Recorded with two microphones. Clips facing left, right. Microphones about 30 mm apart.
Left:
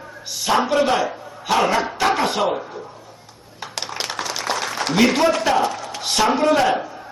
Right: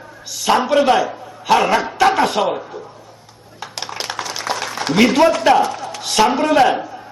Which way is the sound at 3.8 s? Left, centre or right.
Centre.